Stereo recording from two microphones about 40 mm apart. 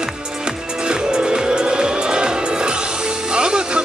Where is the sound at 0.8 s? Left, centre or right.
Centre.